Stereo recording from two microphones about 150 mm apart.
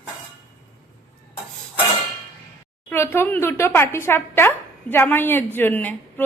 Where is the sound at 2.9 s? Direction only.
15° left (ahead or behind).